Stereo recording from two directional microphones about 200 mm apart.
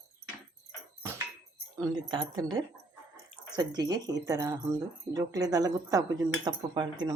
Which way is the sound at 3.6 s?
20° right (ahead or behind).